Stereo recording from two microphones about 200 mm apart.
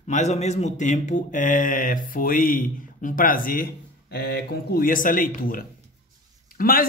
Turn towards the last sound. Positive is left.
turn(degrees=45)  # may be behind; listen again after turning